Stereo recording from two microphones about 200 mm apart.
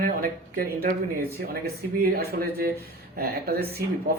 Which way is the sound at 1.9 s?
50° right (ahead or behind).